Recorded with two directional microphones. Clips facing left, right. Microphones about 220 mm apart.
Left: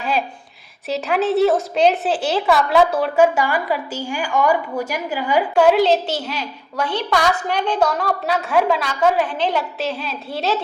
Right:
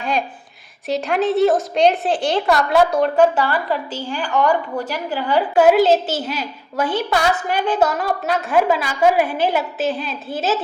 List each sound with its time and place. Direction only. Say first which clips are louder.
0.0 s a sound: even; 5° left (ahead or behind)
0.9 s a woman's voice: right 1 dB; centre (ahead or behind)
5.5 s a woman's voice: right 2 dB; 5° right (ahead or behind)